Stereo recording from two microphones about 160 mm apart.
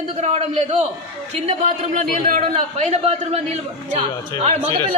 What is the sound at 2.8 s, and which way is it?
A man's voice, 40° right (ahead or behind).